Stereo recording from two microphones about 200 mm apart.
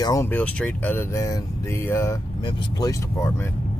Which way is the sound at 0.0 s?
15° left (ahead or behind).